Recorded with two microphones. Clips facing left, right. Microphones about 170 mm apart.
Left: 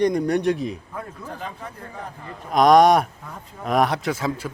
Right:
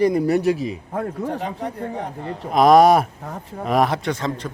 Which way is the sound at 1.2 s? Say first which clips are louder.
Right 8 dB; 70° right (ahead or behind).